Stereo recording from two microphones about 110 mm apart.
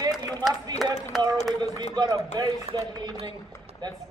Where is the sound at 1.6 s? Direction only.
35° right (ahead or behind).